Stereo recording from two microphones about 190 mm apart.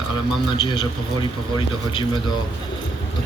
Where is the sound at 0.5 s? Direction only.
25° left (ahead or behind).